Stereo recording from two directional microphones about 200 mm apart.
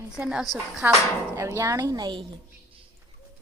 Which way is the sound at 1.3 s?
15° right (ahead or behind).